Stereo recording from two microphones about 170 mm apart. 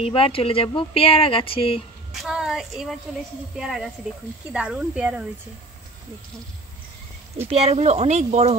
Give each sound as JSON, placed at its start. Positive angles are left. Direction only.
{"t": 0.0, "sound": "speech", "side_deg": 35}
{"t": 2.2, "sound": "a woman's voice", "side_deg": -5}
{"t": 7.4, "sound": "speech", "side_deg": -40}